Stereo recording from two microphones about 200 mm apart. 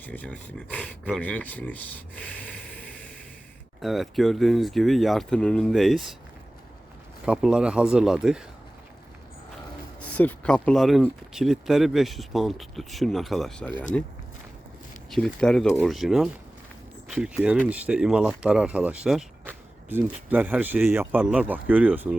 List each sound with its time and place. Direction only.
0.0 s speech: 10° left (ahead or behind)
7.3 s speech: 5° right (ahead or behind)
10.2 s speech: 5° left (ahead or behind)
15.1 s speech: 5° left (ahead or behind)